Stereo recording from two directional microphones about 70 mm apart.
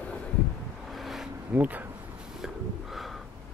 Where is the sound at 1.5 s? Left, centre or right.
Right.